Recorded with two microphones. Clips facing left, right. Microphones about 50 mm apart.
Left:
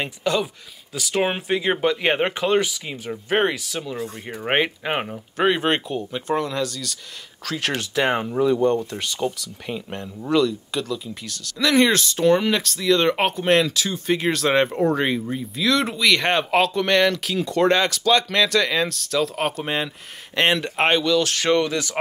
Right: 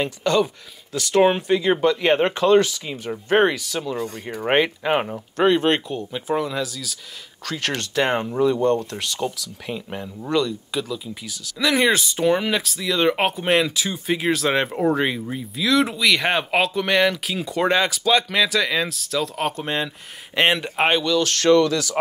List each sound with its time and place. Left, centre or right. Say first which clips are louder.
0.0 s speech: right 3 dB; centre
20.3 s speech: right 1 dB; centre
20.7 s speech: even; centre
21.5 s speech: right 7 dB; left